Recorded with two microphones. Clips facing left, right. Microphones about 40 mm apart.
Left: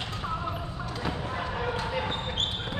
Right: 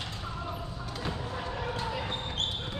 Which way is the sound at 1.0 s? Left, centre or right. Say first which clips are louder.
Left 3 dB; left.